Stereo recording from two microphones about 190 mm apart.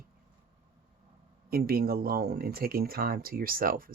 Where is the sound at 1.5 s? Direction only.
55° right (ahead or behind).